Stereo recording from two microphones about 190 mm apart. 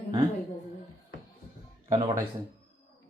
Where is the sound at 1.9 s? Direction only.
15° right (ahead or behind).